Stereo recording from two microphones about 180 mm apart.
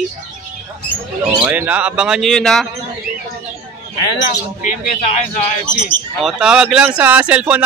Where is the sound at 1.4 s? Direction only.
10° right (ahead or behind).